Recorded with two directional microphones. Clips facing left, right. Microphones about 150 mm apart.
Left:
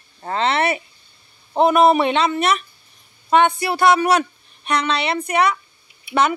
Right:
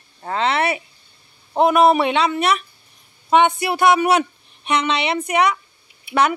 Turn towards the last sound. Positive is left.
turn(degrees=-10)  # may be behind; listen again after turning